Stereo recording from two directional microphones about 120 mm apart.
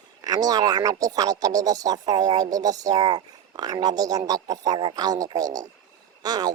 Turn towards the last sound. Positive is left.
turn(degrees=-35)  # may be behind; listen again after turning